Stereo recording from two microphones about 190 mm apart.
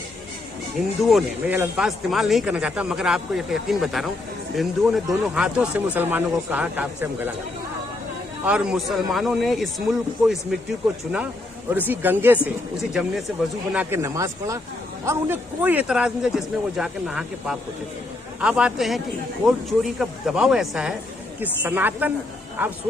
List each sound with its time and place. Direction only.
1.0 s speech: 5° right (ahead or behind)
8.4 s speech: 5° right (ahead or behind)
11.7 s speech: 10° right (ahead or behind)
13.7 s speech: 15° right (ahead or behind)